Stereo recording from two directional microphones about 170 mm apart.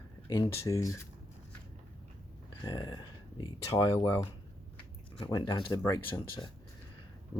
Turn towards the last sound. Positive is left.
turn(degrees=20)  # may be behind; listen again after turning